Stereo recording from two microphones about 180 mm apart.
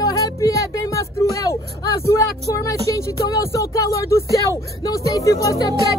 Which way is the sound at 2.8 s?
15° left (ahead or behind).